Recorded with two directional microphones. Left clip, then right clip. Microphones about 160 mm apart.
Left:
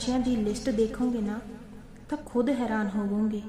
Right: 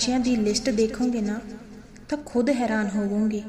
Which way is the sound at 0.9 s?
15° right (ahead or behind).